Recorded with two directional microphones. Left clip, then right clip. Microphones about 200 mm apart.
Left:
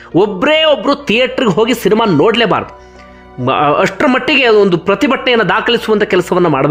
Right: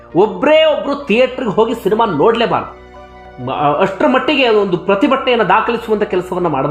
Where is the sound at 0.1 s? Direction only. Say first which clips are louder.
Even; 15° left (ahead or behind).